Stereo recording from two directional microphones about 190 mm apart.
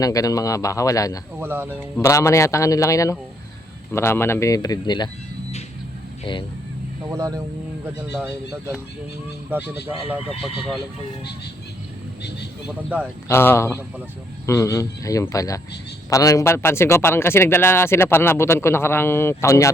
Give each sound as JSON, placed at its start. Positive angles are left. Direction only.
{"t": 0.0, "sound": "a man's voice", "side_deg": 20}
{"t": 1.4, "sound": "speech", "side_deg": -10}
{"t": 2.0, "sound": "a man's voice", "side_deg": 15}
{"t": 7.1, "sound": "speech", "side_deg": -15}
{"t": 12.6, "sound": "speech", "side_deg": -5}
{"t": 13.2, "sound": "a man's voice", "side_deg": 10}